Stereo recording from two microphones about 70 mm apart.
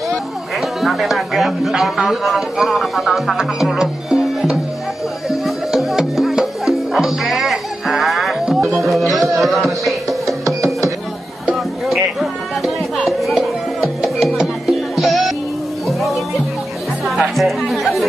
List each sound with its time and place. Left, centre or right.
0.1 s music: centre
2.0 s speech: centre
5.3 s music: centre
9.1 s a sound: centre
10.2 s music: right
11.9 s music: centre
17.4 s chatter: centre